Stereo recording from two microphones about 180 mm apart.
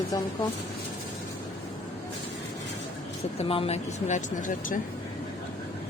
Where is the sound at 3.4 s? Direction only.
35° left (ahead or behind).